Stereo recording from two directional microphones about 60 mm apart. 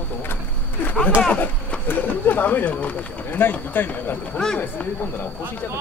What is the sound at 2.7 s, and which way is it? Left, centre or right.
Speech, left.